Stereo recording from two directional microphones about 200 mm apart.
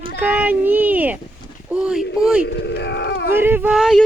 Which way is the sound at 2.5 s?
55° left (ahead or behind).